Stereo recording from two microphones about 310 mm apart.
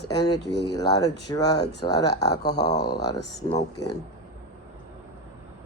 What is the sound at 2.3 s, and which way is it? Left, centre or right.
Speech, left.